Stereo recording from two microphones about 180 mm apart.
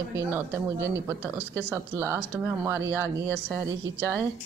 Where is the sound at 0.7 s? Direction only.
80° right.